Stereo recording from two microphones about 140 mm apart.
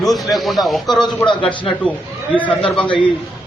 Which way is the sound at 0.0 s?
Centre (ahead or behind).